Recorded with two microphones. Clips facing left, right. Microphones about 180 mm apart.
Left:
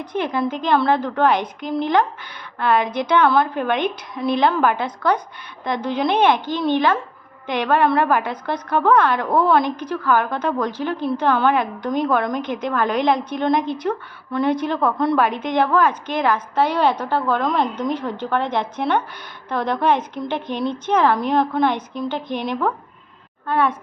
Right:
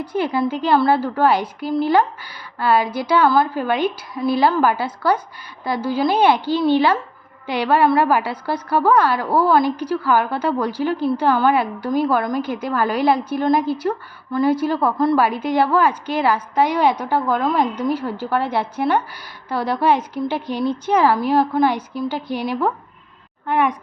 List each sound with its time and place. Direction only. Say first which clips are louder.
0.0 s a woman's voice: right 2 dB; 10° right (ahead or behind)